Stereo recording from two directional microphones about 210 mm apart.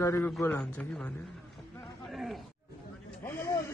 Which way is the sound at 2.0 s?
Centre (ahead or behind).